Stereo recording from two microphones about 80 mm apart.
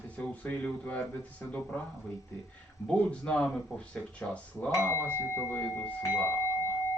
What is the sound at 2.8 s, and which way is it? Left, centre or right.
Speech, centre.